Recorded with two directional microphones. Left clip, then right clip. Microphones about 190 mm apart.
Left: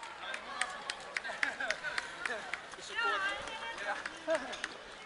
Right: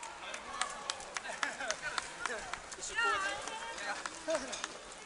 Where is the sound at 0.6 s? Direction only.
15° right (ahead or behind).